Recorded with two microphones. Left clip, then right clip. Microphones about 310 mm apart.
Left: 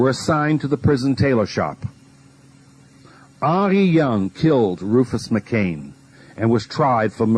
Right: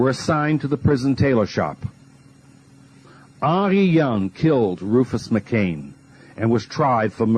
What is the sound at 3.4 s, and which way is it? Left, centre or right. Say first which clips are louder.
Speech: left 1 dB; left.